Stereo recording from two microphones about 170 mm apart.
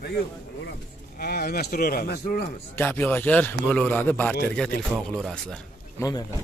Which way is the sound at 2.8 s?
10° left (ahead or behind).